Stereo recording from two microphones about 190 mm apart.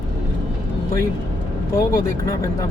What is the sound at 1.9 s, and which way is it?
Speech, 15° left (ahead or behind).